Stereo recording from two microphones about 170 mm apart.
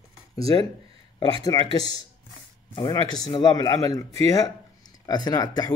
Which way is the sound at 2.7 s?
25° left (ahead or behind).